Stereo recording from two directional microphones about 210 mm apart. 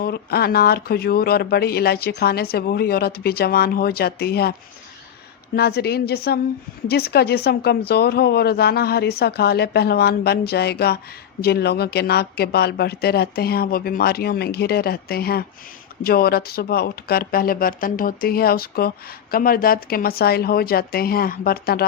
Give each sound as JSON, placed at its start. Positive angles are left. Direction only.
{"t": 0.0, "sound": "speech", "side_deg": 50}
{"t": 5.5, "sound": "speech", "side_deg": 50}